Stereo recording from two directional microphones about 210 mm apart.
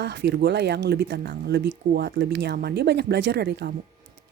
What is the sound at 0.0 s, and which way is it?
Speech, 55° right (ahead or behind).